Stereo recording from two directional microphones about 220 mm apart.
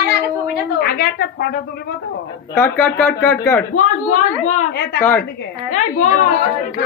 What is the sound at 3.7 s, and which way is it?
Speech, 35° left (ahead or behind).